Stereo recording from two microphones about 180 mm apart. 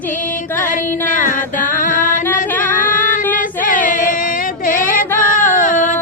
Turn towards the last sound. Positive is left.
turn(degrees=45)  # may be behind; listen again after turning